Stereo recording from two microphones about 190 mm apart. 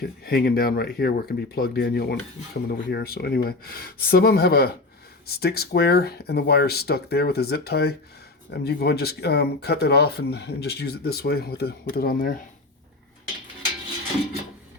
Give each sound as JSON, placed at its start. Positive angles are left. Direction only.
{"t": 0.0, "sound": "speech", "side_deg": 55}